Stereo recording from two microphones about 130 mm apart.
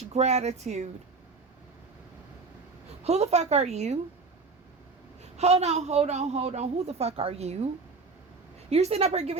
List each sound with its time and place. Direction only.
0.1 s a woman's voice: 60° right (ahead or behind)
3.0 s a woman's voice: 55° right (ahead or behind)
5.4 s a woman's voice: 55° right (ahead or behind)
8.7 s a woman's voice: 50° right (ahead or behind)